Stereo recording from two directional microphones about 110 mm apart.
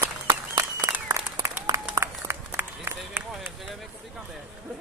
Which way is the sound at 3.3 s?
Centre (ahead or behind).